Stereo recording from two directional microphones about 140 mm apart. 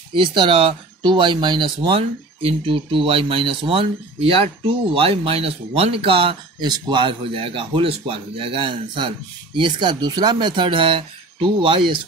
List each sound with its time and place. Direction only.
0.1 s speech: 35° right (ahead or behind)